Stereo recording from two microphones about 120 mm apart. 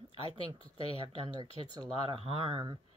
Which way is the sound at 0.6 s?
55° left (ahead or behind).